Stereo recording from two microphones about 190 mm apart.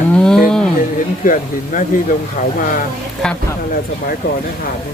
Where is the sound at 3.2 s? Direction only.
5° left (ahead or behind).